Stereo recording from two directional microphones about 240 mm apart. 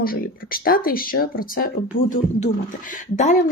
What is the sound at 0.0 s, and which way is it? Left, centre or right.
Speech, left.